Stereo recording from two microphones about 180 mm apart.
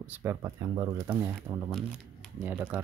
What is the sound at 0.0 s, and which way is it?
Speech, 10° right (ahead or behind).